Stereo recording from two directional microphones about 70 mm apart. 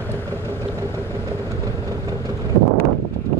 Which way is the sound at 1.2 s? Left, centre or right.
Right.